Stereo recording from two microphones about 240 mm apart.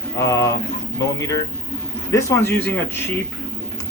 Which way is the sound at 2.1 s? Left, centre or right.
Centre.